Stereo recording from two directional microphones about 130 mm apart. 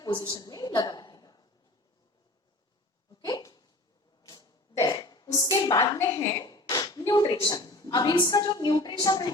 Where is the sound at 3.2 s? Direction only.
30° left (ahead or behind).